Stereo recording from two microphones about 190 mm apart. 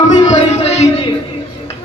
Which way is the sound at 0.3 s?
35° left (ahead or behind).